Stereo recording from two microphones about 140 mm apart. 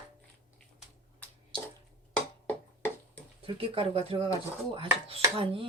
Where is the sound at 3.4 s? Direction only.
40° right (ahead or behind).